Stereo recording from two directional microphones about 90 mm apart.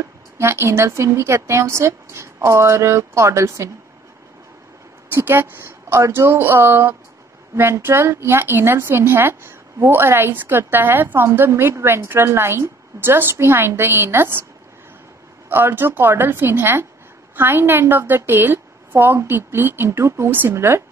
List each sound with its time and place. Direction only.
0.4 s speech: 30° right (ahead or behind)
5.1 s a woman's voice: 25° right (ahead or behind)
15.5 s a woman's voice: 20° right (ahead or behind)